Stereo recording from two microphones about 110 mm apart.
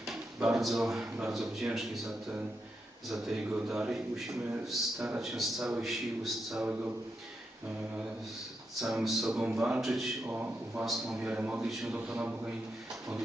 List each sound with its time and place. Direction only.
0.0 s a sound: 5° right (ahead or behind)
1.2 s speech: 5° right (ahead or behind)
8.8 s speech: 5° right (ahead or behind)
10.2 s a man's voice: 15° right (ahead or behind)
10.8 s speech: centre (ahead or behind)
11.3 s a man's voice: 15° right (ahead or behind)
11.7 s speech: centre (ahead or behind)
11.9 s a man's voice: 15° right (ahead or behind)